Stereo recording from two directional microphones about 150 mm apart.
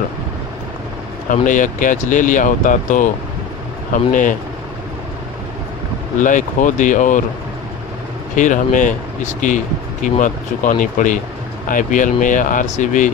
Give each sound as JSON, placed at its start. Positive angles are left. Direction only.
{"t": 1.3, "sound": "speech", "side_deg": 60}
{"t": 6.1, "sound": "speech", "side_deg": 60}
{"t": 8.4, "sound": "speech", "side_deg": 55}